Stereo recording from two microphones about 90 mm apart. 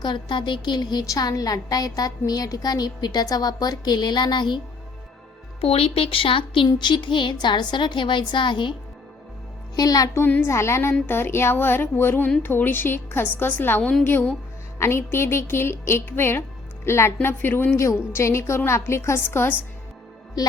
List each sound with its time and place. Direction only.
0.0 s a woman's voice: 60° left (ahead or behind)
5.5 s speech: 90° left; by 6.7 s 75° left (ahead or behind)
6.7 s a woman's voice: 60° left (ahead or behind)
9.7 s a woman's voice: 45° left (ahead or behind)
10.2 s a woman's voice: 25° left (ahead or behind)
17.7 s a woman's voice: 30° left (ahead or behind)